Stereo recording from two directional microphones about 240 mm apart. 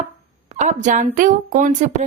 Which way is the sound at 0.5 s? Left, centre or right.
Right.